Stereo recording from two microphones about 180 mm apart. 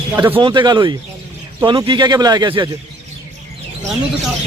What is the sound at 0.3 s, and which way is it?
Speech, 25° right (ahead or behind).